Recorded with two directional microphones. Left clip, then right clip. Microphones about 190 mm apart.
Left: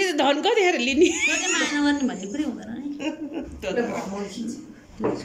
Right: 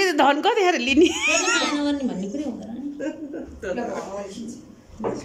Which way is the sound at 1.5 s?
15° right (ahead or behind).